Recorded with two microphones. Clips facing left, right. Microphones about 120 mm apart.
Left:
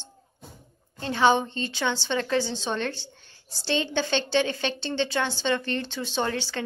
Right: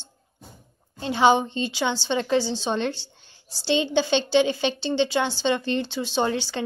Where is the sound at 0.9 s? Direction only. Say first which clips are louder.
Right 2 dB; 15° right (ahead or behind).